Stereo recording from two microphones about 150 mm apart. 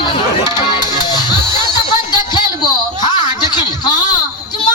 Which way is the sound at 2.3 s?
30° left (ahead or behind).